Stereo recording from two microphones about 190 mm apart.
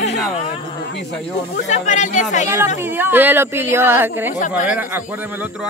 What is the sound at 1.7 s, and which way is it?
Speech, 40° left (ahead or behind).